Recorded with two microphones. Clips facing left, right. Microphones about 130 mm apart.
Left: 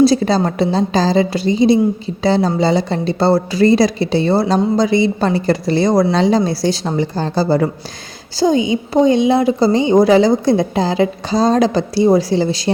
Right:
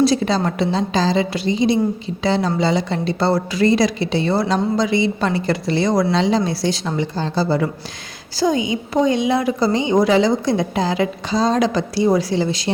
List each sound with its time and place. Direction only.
0.0 s a woman's voice: 35° left (ahead or behind)
8.4 s a woman's voice: 30° left (ahead or behind)